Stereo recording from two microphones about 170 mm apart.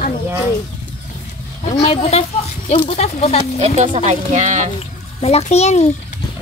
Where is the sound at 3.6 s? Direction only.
40° right (ahead or behind).